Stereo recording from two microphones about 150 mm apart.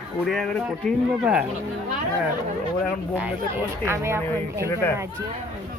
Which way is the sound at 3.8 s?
15° right (ahead or behind).